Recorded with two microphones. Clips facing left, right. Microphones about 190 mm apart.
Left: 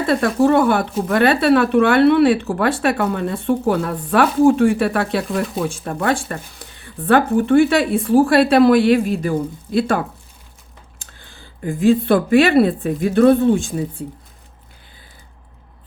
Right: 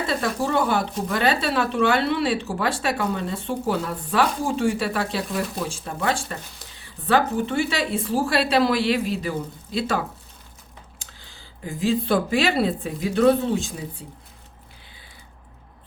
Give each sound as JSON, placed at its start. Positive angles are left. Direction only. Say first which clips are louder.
{"t": 0.1, "sound": "speech", "louder": "left 11 dB", "side_deg": 55}
{"t": 11.0, "sound": "speech", "louder": "left 4 dB", "side_deg": 55}